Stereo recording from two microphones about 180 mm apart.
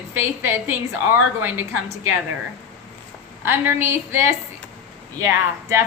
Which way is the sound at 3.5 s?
15° right (ahead or behind).